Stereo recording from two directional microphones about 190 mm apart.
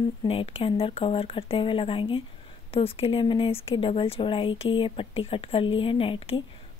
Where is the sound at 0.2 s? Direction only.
30° left (ahead or behind).